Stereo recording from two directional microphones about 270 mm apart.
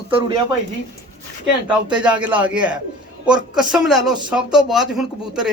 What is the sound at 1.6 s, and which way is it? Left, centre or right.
Speech, centre.